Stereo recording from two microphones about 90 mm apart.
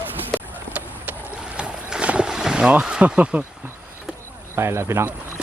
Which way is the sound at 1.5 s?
10° right (ahead or behind).